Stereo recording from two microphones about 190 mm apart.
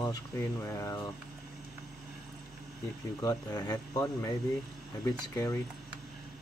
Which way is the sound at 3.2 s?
20° left (ahead or behind).